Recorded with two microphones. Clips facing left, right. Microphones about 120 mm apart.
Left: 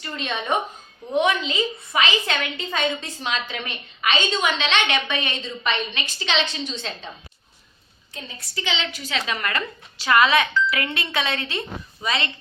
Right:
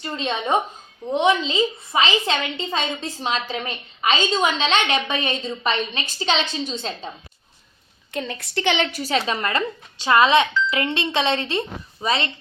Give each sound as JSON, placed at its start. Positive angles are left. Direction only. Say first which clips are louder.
{"t": 0.0, "sound": "a woman's voice", "louder": "right 3 dB", "side_deg": -30}
{"t": 8.1, "sound": "a woman's voice", "louder": "right 9 dB", "side_deg": -75}